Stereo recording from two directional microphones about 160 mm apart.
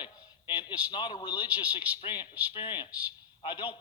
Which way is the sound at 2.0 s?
30° left (ahead or behind).